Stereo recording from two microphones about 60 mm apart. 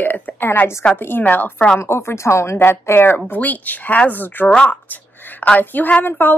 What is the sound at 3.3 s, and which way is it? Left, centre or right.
Speech, left.